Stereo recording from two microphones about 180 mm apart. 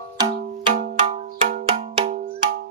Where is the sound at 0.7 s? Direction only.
50° right (ahead or behind).